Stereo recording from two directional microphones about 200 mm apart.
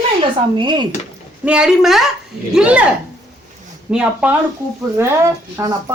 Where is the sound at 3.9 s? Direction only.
5° right (ahead or behind).